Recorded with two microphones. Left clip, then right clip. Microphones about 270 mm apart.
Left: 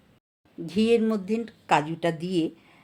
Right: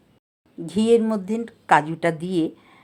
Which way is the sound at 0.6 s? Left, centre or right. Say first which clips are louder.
Right 4 dB; centre.